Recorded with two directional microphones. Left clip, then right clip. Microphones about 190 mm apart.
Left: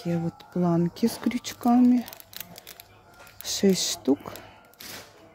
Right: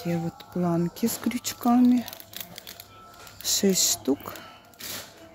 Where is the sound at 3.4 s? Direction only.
10° left (ahead or behind).